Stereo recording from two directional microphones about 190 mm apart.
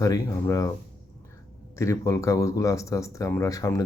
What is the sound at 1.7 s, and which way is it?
Speech, 15° left (ahead or behind).